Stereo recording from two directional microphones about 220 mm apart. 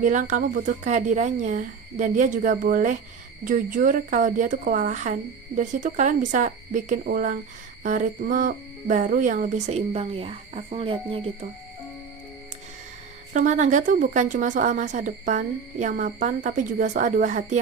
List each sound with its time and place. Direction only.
0.0 s a woman's voice: 35° right (ahead or behind)
13.3 s a woman's voice: 35° right (ahead or behind)